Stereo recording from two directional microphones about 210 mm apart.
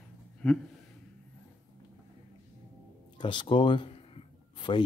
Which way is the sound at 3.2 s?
20° left (ahead or behind).